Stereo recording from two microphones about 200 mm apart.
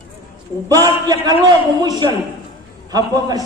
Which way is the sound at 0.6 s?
15° right (ahead or behind).